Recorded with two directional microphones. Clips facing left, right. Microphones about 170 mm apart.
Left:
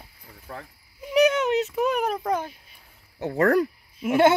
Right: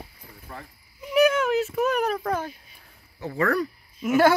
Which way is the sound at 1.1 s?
20° left (ahead or behind).